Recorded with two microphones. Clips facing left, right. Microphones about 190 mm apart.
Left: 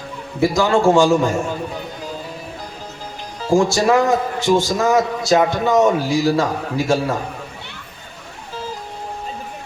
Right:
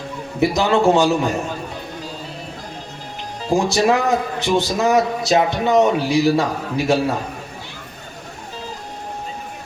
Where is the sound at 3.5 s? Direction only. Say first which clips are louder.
Left 2 dB; 20° right (ahead or behind).